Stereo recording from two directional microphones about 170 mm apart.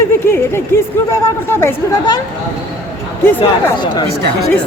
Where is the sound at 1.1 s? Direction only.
15° left (ahead or behind).